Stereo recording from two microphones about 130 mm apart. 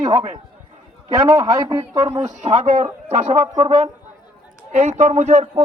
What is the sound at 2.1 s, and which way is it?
Speech, 60° right (ahead or behind).